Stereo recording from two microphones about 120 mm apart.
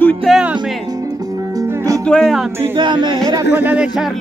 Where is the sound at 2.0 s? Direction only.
5° left (ahead or behind).